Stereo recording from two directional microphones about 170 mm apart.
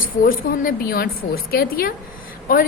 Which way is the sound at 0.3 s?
60° left (ahead or behind).